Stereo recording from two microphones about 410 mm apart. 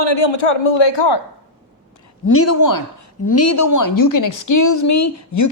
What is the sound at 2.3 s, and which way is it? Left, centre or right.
A woman's voice, left.